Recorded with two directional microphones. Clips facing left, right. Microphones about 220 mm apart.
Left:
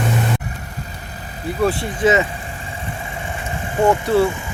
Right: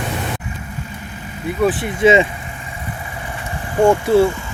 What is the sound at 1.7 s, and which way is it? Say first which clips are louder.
Speech: right 3 dB; 20° right (ahead or behind).